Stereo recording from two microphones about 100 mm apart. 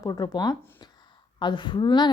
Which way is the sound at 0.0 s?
40° left (ahead or behind).